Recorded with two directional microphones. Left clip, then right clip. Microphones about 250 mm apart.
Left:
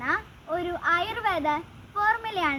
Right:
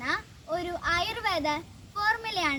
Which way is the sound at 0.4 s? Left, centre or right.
Centre.